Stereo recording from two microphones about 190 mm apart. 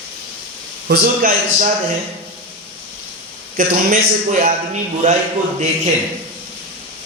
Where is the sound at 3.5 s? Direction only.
45° right (ahead or behind).